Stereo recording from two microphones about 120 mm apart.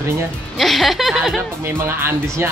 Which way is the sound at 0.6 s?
Centre (ahead or behind).